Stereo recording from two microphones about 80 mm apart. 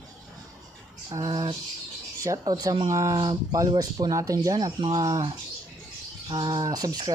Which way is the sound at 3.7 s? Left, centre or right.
Right.